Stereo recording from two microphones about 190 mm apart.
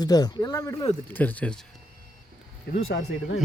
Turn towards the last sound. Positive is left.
turn(degrees=60)  # may be behind; listen again after turning